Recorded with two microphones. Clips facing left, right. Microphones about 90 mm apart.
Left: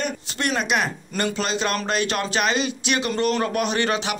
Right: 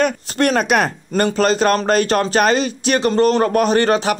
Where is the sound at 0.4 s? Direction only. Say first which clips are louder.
Right 8 dB; 50° right (ahead or behind).